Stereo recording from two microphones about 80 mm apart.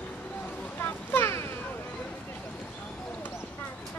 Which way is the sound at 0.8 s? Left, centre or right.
Left.